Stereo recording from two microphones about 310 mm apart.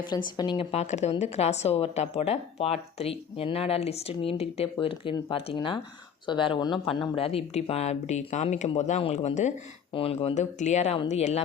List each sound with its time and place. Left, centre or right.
0.3 s a woman's voice: centre